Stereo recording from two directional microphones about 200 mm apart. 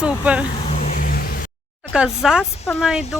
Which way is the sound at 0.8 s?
40° left (ahead or behind).